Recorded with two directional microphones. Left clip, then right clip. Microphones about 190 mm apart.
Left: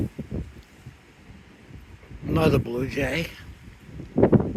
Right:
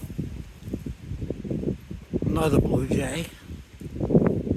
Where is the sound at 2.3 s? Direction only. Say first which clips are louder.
Left 1 dB; 5° right (ahead or behind).